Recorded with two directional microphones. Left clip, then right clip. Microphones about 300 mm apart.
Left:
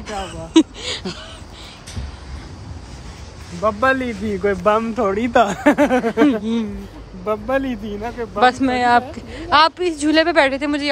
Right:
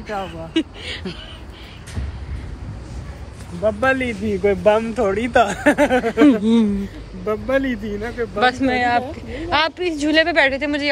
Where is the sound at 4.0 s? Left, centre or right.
Left.